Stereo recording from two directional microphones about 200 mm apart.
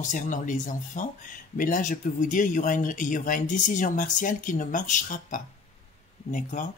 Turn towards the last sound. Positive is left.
turn(degrees=40)  # may be behind; listen again after turning